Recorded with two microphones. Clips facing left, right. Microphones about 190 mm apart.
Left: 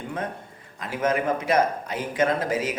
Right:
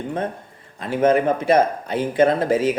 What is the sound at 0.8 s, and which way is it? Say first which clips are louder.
Speech: right 7 dB; 30° right (ahead or behind).